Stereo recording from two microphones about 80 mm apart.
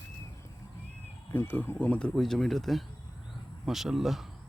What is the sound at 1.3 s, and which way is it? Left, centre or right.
Speech, left.